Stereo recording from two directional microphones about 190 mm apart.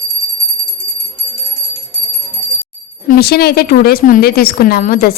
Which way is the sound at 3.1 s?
55° left (ahead or behind).